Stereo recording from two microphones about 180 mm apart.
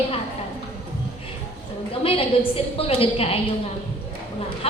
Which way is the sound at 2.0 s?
30° left (ahead or behind).